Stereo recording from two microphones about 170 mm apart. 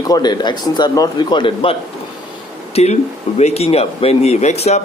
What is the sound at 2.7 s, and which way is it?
Speech, 40° left (ahead or behind).